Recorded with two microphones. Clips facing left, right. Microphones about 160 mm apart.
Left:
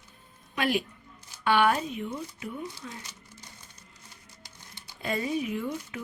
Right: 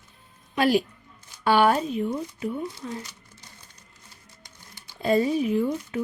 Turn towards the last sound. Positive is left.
turn(degrees=-35)  # may be behind; listen again after turning